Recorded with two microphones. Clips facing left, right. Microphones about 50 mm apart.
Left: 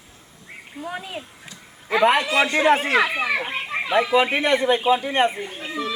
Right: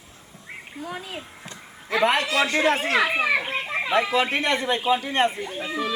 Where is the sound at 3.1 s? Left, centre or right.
Centre.